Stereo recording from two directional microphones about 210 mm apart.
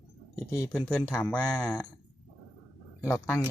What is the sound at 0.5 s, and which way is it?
Speech, 15° left (ahead or behind).